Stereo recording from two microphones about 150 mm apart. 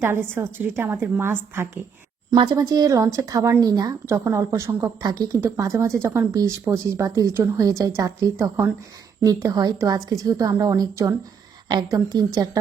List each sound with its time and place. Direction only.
0.0 s a woman's voice: 15° right (ahead or behind)
2.3 s speech: 30° right (ahead or behind)